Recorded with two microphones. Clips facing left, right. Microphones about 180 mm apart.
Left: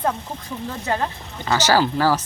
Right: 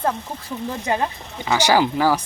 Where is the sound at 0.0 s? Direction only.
5° right (ahead or behind).